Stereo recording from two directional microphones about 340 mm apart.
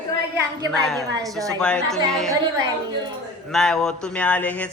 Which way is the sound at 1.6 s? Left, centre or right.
Centre.